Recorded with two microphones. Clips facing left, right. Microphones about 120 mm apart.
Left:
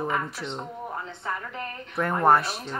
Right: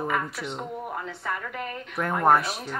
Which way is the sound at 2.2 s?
Centre (ahead or behind).